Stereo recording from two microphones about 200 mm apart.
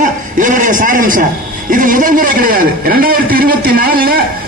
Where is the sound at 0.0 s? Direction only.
40° right (ahead or behind).